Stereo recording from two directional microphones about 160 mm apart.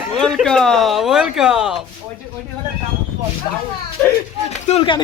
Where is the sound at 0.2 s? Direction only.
Centre (ahead or behind).